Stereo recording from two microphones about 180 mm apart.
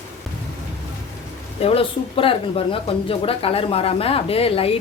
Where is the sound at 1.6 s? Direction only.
30° left (ahead or behind).